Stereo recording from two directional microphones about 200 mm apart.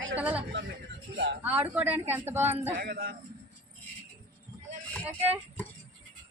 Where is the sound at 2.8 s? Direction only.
50° right (ahead or behind).